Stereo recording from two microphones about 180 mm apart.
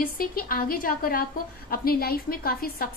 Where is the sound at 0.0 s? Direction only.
55° left (ahead or behind).